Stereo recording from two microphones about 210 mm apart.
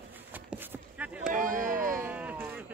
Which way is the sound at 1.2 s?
40° right (ahead or behind).